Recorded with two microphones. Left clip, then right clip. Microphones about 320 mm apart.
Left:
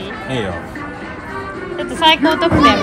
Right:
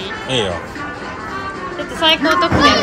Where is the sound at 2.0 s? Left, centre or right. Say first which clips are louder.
Left 1 dB; left.